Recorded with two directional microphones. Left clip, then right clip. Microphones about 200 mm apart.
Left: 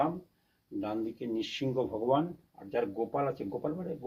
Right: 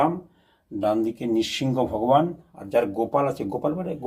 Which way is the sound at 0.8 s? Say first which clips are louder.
Right 13 dB; 10° left (ahead or behind).